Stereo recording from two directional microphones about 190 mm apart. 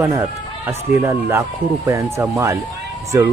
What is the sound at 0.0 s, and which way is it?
Speech, 15° right (ahead or behind).